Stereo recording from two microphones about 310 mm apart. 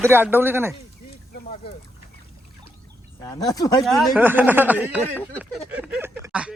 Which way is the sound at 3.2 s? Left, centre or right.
Centre.